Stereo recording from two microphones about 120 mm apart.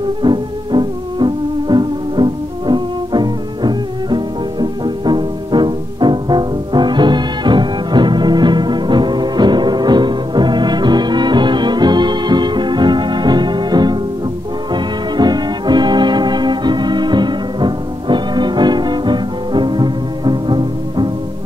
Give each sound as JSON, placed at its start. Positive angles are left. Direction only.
{"t": 0.2, "sound": "music", "side_deg": -40}